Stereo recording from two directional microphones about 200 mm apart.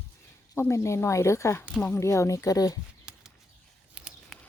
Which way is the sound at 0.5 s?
15° left (ahead or behind).